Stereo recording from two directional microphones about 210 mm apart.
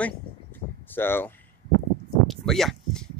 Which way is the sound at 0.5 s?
10° left (ahead or behind).